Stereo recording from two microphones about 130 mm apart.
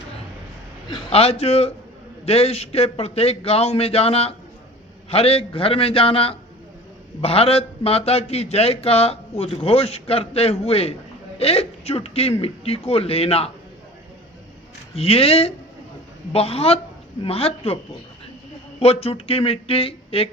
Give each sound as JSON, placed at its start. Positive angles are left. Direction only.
{"t": 0.9, "sound": "a man's voice", "side_deg": 45}
{"t": 14.9, "sound": "a man's voice", "side_deg": 50}
{"t": 18.8, "sound": "a man's voice", "side_deg": 50}